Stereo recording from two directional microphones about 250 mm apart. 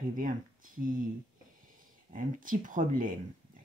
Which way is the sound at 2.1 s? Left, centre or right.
Right.